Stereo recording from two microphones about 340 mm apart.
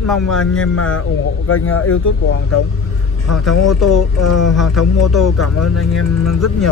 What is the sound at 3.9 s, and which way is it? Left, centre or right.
Speech, left.